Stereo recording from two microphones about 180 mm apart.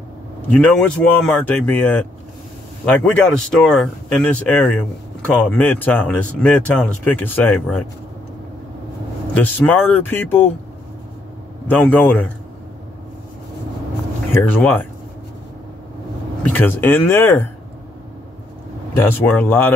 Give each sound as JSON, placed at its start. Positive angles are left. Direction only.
{"t": 0.5, "sound": "speech", "side_deg": 5}
{"t": 9.3, "sound": "speech", "side_deg": 10}
{"t": 11.6, "sound": "speech", "side_deg": 10}
{"t": 14.3, "sound": "speech", "side_deg": 10}
{"t": 16.5, "sound": "speech", "side_deg": 10}
{"t": 18.9, "sound": "speech", "side_deg": 10}